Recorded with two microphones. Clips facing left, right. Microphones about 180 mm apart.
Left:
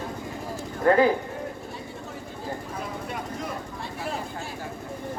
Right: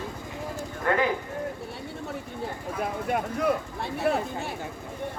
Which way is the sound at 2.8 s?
60° right (ahead or behind).